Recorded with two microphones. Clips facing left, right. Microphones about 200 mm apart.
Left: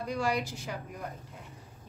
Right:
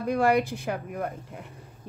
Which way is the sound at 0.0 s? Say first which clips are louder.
Right 8 dB; 55° right (ahead or behind).